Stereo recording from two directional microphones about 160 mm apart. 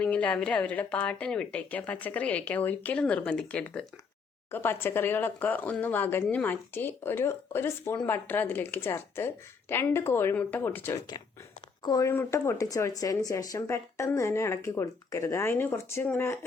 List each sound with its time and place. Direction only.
0.0 s speech: 10° left (ahead or behind)
11.8 s speech: 25° left (ahead or behind)